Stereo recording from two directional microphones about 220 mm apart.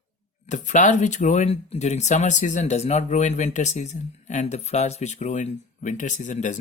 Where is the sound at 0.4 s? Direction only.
35° left (ahead or behind).